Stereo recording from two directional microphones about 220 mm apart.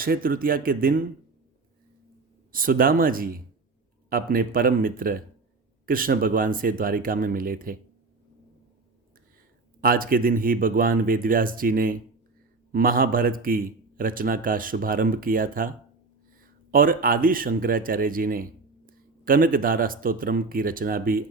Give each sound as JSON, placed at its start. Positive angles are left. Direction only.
{"t": 0.0, "sound": "a man's voice", "side_deg": -40}
{"t": 2.5, "sound": "a man's voice", "side_deg": -40}
{"t": 9.8, "sound": "a man's voice", "side_deg": -40}